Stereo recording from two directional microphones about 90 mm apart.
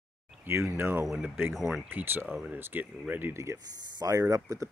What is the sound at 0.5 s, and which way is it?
Speech, 30° right (ahead or behind).